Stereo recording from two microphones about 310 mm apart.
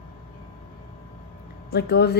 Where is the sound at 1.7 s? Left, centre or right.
Left.